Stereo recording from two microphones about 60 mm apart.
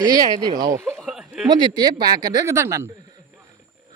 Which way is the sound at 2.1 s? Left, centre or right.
Right.